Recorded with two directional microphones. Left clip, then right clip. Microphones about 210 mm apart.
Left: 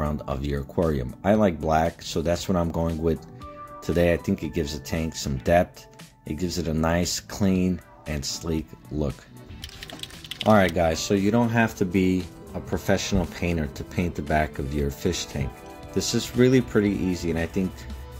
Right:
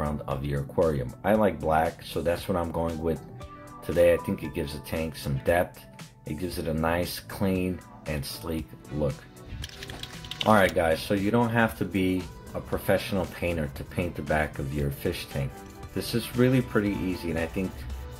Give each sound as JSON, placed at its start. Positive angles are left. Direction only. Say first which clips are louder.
{"t": 0.0, "sound": "speech", "louder": "left 2 dB", "side_deg": 50}
{"t": 9.9, "sound": "speech", "louder": "even", "side_deg": 50}